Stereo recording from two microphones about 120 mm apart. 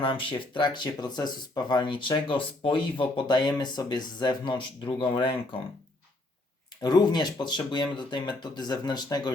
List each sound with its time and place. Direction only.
0.0 s speech: 45° left (ahead or behind)
6.8 s speech: 35° left (ahead or behind)